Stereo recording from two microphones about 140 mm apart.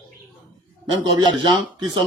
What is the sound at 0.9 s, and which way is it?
Speech, 30° right (ahead or behind).